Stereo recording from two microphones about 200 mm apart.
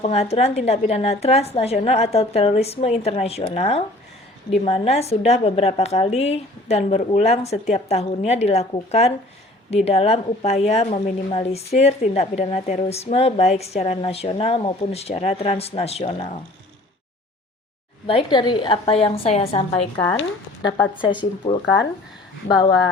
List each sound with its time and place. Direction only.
0.0 s a woman's voice: 30° left (ahead or behind)
18.0 s a woman's voice: 25° left (ahead or behind)